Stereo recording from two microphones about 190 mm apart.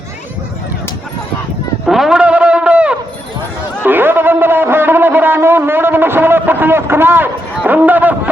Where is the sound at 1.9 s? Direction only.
Centre (ahead or behind).